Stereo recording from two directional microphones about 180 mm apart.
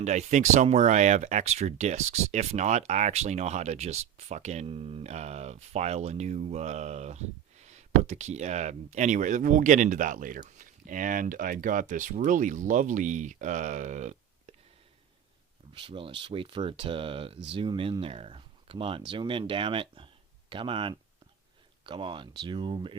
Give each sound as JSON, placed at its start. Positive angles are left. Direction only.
{"t": 0.0, "sound": "speech", "side_deg": -40}
{"t": 15.7, "sound": "speech", "side_deg": -30}